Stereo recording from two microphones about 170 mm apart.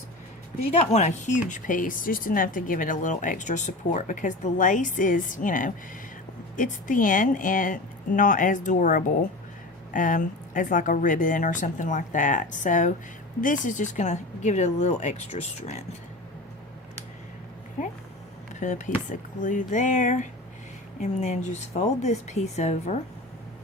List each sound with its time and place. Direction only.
0.7 s a woman's voice: 40° left (ahead or behind)
18.6 s a woman's voice: 45° left (ahead or behind)